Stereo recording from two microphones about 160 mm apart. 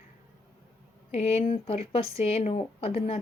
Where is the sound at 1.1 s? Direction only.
40° left (ahead or behind).